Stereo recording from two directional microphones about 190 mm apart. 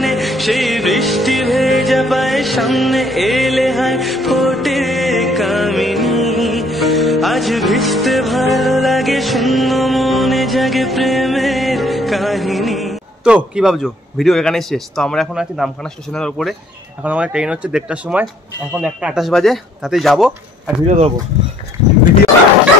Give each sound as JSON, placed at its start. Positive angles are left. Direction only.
{"t": 0.0, "sound": "music", "side_deg": 0}
{"t": 16.2, "sound": "speech", "side_deg": 0}
{"t": 20.8, "sound": "speech", "side_deg": -35}